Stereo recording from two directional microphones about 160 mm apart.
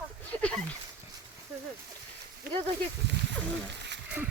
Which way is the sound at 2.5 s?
65° right (ahead or behind).